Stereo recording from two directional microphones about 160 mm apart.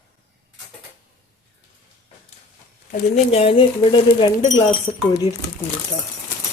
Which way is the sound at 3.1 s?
40° left (ahead or behind).